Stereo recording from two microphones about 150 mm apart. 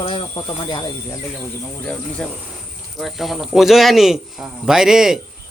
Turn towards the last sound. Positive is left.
turn(degrees=-5)  # may be behind; listen again after turning